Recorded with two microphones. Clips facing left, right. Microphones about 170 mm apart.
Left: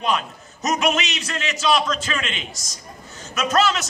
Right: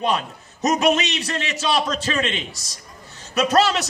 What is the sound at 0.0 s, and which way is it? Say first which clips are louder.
A man's voice: right 1 dB; 35° right (ahead or behind).